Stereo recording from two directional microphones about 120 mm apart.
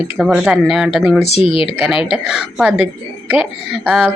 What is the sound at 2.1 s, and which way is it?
Speech, 5° right (ahead or behind).